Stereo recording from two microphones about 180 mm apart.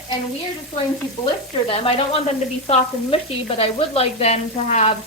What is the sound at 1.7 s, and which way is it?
A woman's voice, 30° left (ahead or behind).